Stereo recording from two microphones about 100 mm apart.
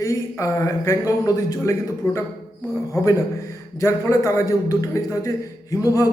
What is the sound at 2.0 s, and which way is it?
A man's voice, 20° left (ahead or behind).